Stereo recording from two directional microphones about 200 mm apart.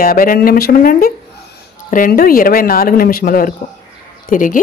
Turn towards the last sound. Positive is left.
turn(degrees=40)  # may be behind; listen again after turning